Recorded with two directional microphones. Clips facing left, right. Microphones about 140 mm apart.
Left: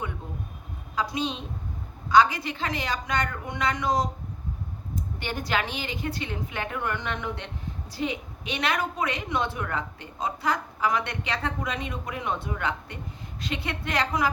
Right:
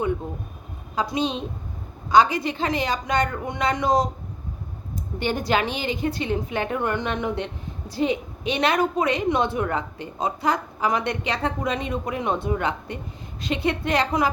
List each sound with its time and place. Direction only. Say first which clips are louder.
0.9 s a woman's voice: right 4 dB; 20° right (ahead or behind)
5.2 s a woman's voice: right 7 dB; 20° right (ahead or behind)